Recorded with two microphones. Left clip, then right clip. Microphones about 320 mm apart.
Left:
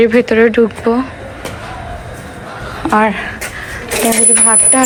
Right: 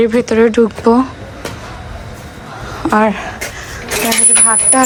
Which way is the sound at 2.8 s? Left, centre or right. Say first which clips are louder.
Even; centre.